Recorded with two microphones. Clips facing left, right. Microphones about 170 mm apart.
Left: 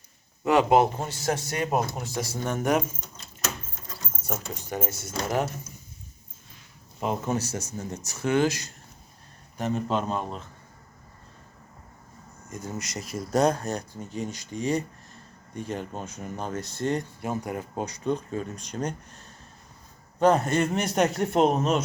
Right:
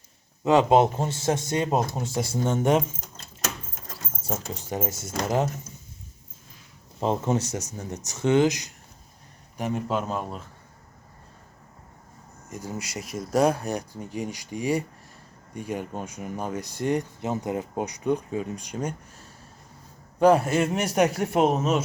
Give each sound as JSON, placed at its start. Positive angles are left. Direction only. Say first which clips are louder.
{"t": 0.4, "sound": "speech", "louder": "right 2 dB", "side_deg": -20}
{"t": 4.5, "sound": "speech", "louder": "right 2 dB", "side_deg": -25}
{"t": 7.0, "sound": "speech", "louder": "right 3 dB", "side_deg": -25}
{"t": 12.5, "sound": "speech", "louder": "right 1 dB", "side_deg": -15}